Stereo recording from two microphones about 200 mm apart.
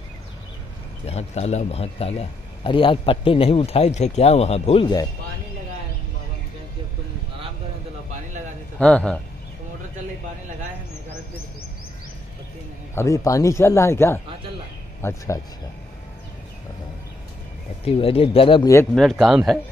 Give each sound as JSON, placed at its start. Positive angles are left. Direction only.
{"t": 1.0, "sound": "a man's voice", "side_deg": 30}
{"t": 8.7, "sound": "speech", "side_deg": 5}
{"t": 12.9, "sound": "speech", "side_deg": 15}
{"t": 17.8, "sound": "a man's voice", "side_deg": 30}
{"t": 18.9, "sound": "speech", "side_deg": 0}